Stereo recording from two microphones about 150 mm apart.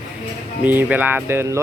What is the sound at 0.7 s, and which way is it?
Speech, 10° right (ahead or behind).